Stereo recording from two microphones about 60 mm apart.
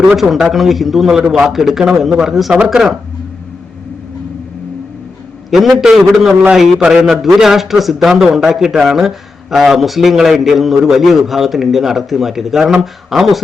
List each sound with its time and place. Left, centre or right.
0.1 s speech: centre
5.5 s a man's voice: centre